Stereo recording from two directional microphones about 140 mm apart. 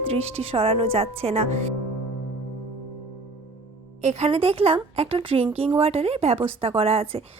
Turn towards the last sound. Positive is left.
turn(degrees=-45)  # may be behind; listen again after turning